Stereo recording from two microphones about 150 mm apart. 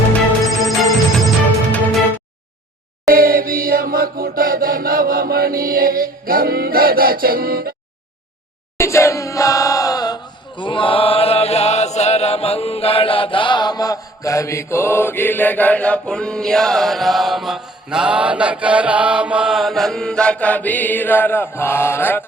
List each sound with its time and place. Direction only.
0.4 s music: centre (ahead or behind)
3.1 s chant: 75° right (ahead or behind)
8.8 s battle cry: 20° left (ahead or behind)
10.6 s chant: 35° left (ahead or behind); by 22.2 s 15° left (ahead or behind)